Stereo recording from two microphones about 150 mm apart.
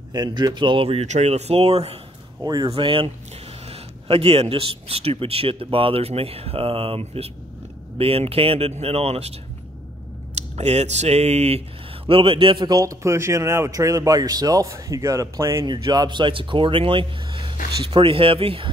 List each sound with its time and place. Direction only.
0.1 s speech: 30° right (ahead or behind)
2.4 s speech: 25° right (ahead or behind)
2.7 s speech: 35° right (ahead or behind)
10.3 s speech: 45° right (ahead or behind)
12.1 s speech: 35° right (ahead or behind)